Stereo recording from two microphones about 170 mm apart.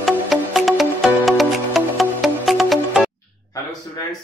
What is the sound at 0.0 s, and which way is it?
Music, centre (ahead or behind).